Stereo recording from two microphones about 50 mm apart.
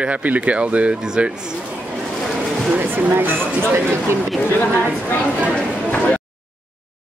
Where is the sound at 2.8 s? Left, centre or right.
Right.